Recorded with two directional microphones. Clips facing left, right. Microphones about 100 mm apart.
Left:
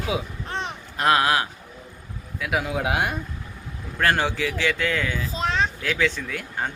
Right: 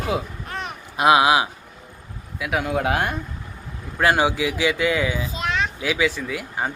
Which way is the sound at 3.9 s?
10° right (ahead or behind).